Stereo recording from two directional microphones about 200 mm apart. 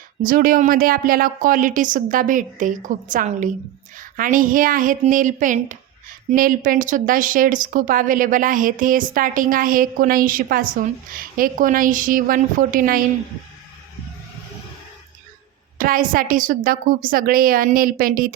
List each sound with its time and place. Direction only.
0.2 s a woman's voice: 45° right (ahead or behind)
15.8 s a woman's voice: 45° right (ahead or behind)